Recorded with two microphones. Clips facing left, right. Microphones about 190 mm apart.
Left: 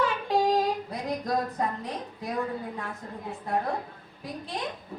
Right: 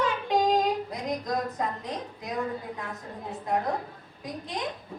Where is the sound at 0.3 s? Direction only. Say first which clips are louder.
Right 1 dB; 20° right (ahead or behind).